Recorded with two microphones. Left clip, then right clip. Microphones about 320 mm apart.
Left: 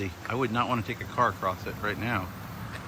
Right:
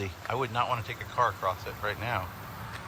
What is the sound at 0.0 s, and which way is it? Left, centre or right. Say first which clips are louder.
Speech: left 1 dB; centre.